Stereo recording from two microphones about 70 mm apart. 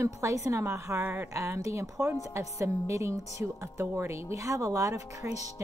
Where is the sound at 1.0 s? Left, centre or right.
Right.